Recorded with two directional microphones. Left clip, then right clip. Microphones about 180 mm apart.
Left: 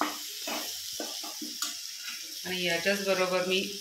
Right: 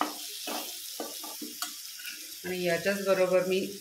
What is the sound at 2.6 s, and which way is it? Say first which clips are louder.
Speech: even; 45° right (ahead or behind).